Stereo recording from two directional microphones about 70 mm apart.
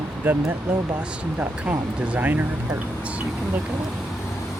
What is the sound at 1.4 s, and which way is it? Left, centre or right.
Speech, right.